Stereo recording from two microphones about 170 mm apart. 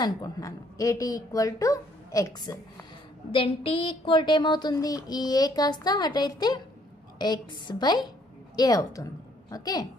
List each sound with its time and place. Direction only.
0.0 s speech: 20° left (ahead or behind)
3.3 s speech: 30° left (ahead or behind)